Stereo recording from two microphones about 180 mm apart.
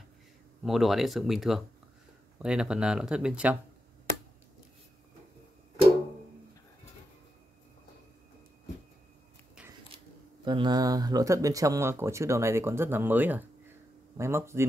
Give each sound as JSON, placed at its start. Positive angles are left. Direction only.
{"t": 0.7, "sound": "speech", "side_deg": 0}
{"t": 10.4, "sound": "speech", "side_deg": -25}